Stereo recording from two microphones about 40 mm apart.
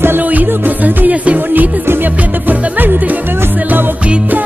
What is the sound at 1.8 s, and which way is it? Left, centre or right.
Music, right.